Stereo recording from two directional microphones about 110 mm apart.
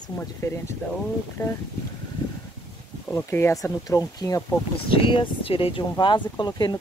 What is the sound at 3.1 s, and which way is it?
Speech, 25° left (ahead or behind).